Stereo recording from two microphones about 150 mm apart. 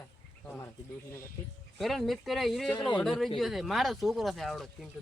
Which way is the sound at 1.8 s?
Centre (ahead or behind).